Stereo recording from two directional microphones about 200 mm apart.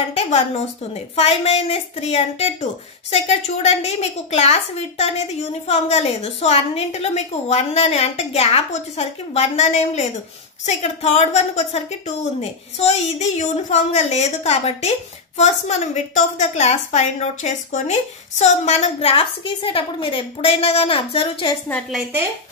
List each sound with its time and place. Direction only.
0.1 s a woman's voice: 30° left (ahead or behind)
21.6 s a woman's voice: 5° left (ahead or behind)